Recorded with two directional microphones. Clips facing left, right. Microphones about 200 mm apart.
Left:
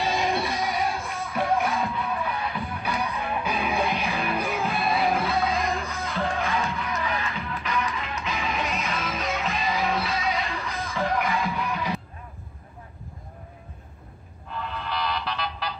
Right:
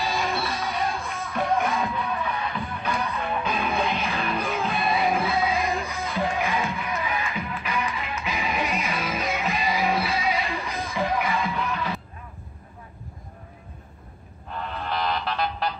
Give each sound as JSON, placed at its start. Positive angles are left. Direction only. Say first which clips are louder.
{"t": 0.0, "sound": "music", "louder": "left 2 dB", "side_deg": 15}
{"t": 1.3, "sound": "music", "louder": "even", "side_deg": 0}
{"t": 4.5, "sound": "music", "louder": "even", "side_deg": 0}
{"t": 5.7, "sound": "music", "louder": "right 1 dB", "side_deg": -15}
{"t": 11.1, "sound": "music", "louder": "even", "side_deg": 0}
{"t": 11.7, "sound": "music", "louder": "even", "side_deg": 15}
{"t": 14.5, "sound": "a sound", "louder": "right 2 dB", "side_deg": -50}